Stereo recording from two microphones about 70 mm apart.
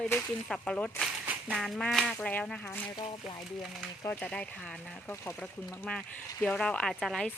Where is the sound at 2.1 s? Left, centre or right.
Centre.